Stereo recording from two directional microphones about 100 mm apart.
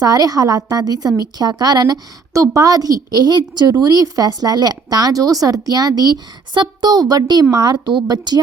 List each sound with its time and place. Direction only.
0.0 s a woman's voice: 40° right (ahead or behind)